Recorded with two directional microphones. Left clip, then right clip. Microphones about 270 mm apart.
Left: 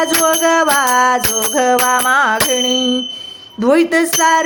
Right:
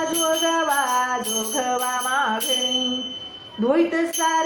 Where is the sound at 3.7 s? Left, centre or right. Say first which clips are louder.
Left 8 dB; left.